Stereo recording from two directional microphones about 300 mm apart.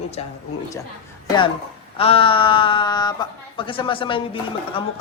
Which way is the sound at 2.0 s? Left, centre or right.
Centre.